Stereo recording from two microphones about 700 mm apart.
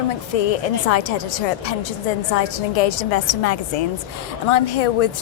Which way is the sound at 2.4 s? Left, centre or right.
Left.